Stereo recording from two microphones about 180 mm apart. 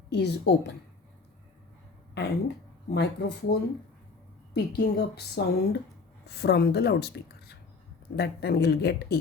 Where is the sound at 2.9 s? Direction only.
65° left (ahead or behind).